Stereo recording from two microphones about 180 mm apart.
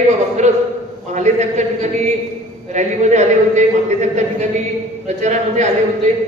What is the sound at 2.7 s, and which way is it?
A man's voice, 40° right (ahead or behind).